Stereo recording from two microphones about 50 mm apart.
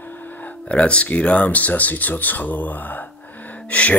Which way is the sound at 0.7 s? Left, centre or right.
Left.